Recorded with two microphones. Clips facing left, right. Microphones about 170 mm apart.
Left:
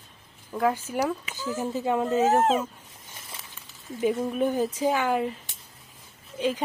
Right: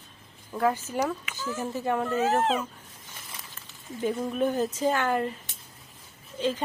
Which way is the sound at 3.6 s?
10° left (ahead or behind).